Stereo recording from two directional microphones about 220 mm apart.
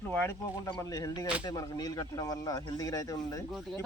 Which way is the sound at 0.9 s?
15° left (ahead or behind).